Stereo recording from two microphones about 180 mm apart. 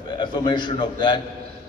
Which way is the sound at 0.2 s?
25° left (ahead or behind).